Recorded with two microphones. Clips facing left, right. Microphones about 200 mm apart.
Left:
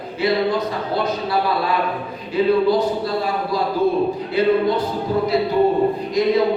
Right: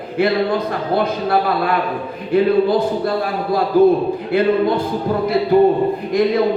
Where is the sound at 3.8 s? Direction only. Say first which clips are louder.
Right 8 dB; 55° right (ahead or behind).